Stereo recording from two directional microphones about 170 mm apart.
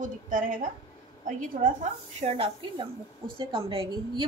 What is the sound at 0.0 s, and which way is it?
Speech, 50° right (ahead or behind).